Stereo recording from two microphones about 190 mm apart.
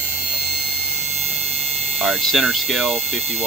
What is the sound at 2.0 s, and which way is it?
Speech, centre (ahead or behind).